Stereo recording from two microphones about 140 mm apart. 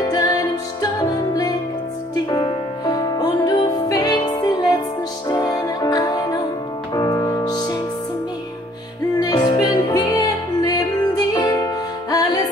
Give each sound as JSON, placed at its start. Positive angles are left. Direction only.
{"t": 0.1, "sound": "music", "side_deg": 25}
{"t": 2.3, "sound": "music", "side_deg": 30}
{"t": 9.2, "sound": "music", "side_deg": 30}